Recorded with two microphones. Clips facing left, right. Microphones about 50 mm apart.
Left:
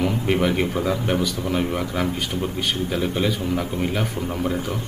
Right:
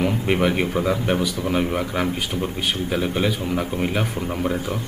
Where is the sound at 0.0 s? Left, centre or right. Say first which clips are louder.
Right 1 dB; centre.